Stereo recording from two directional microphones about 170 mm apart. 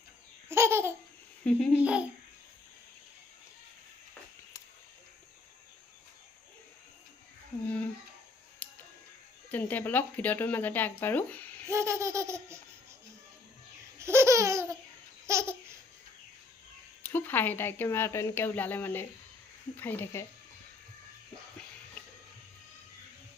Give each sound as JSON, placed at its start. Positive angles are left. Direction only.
{"t": 0.4, "sound": "laughter", "side_deg": -15}
{"t": 1.5, "sound": "speech", "side_deg": 5}
{"t": 1.8, "sound": "laughter", "side_deg": -5}
{"t": 9.5, "sound": "speech", "side_deg": 10}
{"t": 11.7, "sound": "laughter", "side_deg": -15}
{"t": 14.0, "sound": "laughter", "side_deg": -15}
{"t": 17.0, "sound": "speech", "side_deg": 10}